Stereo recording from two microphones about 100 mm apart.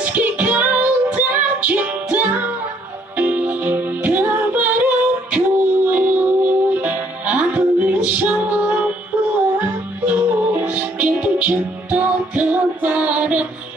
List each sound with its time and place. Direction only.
0.0 s music: 15° right (ahead or behind)